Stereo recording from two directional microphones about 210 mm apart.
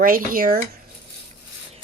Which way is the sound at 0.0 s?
40° right (ahead or behind).